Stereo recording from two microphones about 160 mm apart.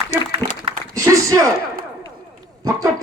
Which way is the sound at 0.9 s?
20° right (ahead or behind).